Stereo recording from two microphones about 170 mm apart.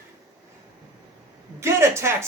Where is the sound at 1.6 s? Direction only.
15° right (ahead or behind).